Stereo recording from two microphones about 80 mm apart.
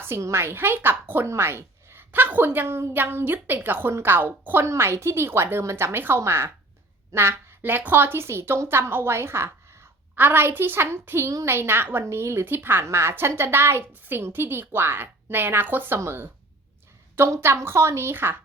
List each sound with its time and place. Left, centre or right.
0.0 s a woman's voice: right